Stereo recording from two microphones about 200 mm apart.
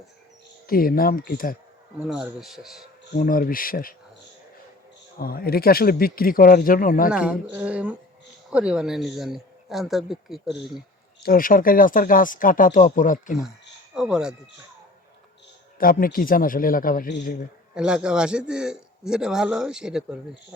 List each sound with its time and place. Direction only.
0.7 s speech: 45° left (ahead or behind)
2.0 s a man's voice: centre (ahead or behind)
3.2 s speech: 45° left (ahead or behind)
5.2 s speech: 50° left (ahead or behind)
7.1 s a man's voice: 5° right (ahead or behind)
11.2 s speech: 45° left (ahead or behind)
13.9 s a man's voice: 5° right (ahead or behind)
15.8 s speech: 45° left (ahead or behind)
17.7 s a man's voice: 5° right (ahead or behind)